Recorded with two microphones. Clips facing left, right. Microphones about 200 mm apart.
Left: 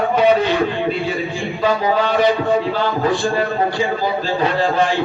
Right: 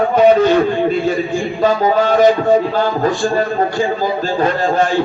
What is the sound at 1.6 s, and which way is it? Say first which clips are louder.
Music: right 3 dB; 45° right (ahead or behind).